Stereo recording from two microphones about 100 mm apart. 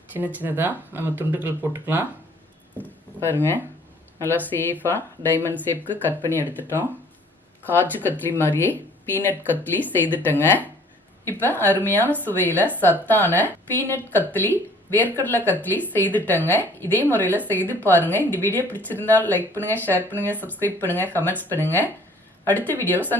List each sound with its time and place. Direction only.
0.3 s speech: 20° right (ahead or behind)
3.2 s a woman's voice: 20° left (ahead or behind)